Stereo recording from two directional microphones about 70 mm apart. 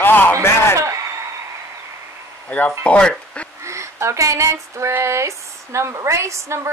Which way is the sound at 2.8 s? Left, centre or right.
Centre.